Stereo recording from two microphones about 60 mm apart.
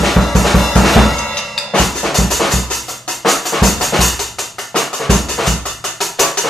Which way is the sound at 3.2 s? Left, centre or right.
Centre.